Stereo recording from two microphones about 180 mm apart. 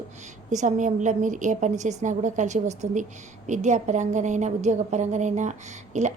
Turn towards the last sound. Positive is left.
turn(degrees=-40)  # may be behind; listen again after turning